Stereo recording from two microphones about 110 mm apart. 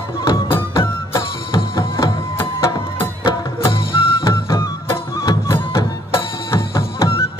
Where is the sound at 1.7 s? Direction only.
30° left (ahead or behind).